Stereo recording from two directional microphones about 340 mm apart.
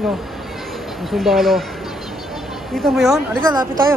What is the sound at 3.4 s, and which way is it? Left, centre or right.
Speech, centre.